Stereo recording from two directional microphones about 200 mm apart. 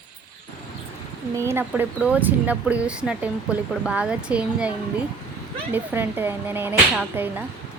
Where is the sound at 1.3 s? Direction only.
10° right (ahead or behind).